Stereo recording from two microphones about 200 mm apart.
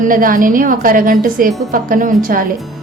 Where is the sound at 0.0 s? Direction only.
45° right (ahead or behind).